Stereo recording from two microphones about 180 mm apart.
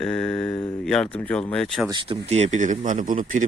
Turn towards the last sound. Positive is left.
turn(degrees=-45)  # may be behind; listen again after turning